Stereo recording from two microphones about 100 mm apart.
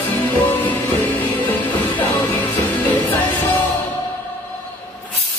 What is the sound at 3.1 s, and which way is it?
Music, 15° left (ahead or behind).